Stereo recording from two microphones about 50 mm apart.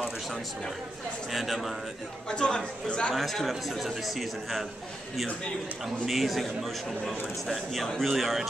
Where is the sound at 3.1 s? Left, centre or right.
Centre.